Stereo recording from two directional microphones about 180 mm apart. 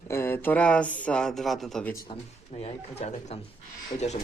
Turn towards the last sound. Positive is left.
turn(degrees=40)  # may be behind; listen again after turning